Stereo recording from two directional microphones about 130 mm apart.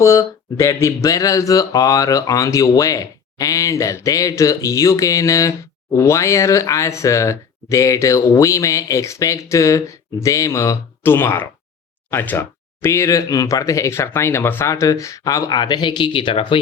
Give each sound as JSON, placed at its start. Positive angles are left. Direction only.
{"t": 0.0, "sound": "speech", "side_deg": 25}